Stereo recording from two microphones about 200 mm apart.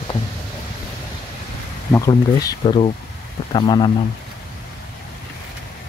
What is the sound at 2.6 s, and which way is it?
Speech, 25° left (ahead or behind).